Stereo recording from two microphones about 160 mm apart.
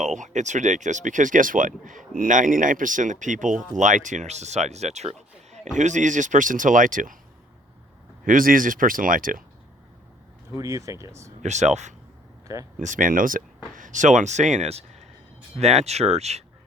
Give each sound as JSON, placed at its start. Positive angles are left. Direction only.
{"t": 0.0, "sound": "speech", "side_deg": -50}
{"t": 8.2, "sound": "speech", "side_deg": -60}
{"t": 10.6, "sound": "speech", "side_deg": -20}
{"t": 11.4, "sound": "speech", "side_deg": -45}
{"t": 12.5, "sound": "speech", "side_deg": -20}
{"t": 12.8, "sound": "speech", "side_deg": -55}